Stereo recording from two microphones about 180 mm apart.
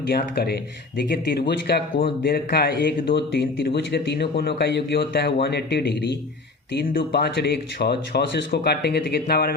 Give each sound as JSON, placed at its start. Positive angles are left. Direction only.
{"t": 0.1, "sound": "speech", "side_deg": 60}